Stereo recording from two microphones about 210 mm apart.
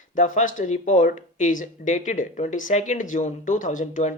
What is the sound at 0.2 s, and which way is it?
Speech, 35° left (ahead or behind).